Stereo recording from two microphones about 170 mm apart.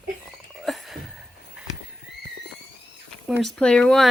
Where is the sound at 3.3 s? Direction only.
Centre (ahead or behind).